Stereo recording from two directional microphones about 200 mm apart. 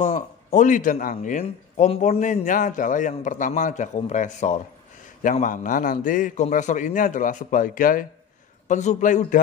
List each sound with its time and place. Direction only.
0.0 s a man's voice: 35° left (ahead or behind)